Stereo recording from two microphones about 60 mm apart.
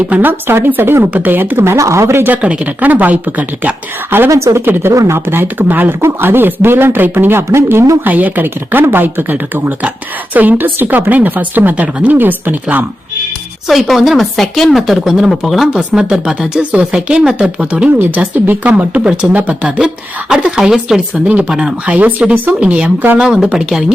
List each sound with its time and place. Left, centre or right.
0.1 s speech: right
2.2 s speech: right
4.3 s a woman's voice: right
4.6 s speech: right
4.9 s speech: right
8.0 s speech: right
13.7 s a woman's voice: centre
16.0 s speech: centre
18.3 s speech: right
20.3 s speech: centre
21.2 s speech: right; by 23.9 s centre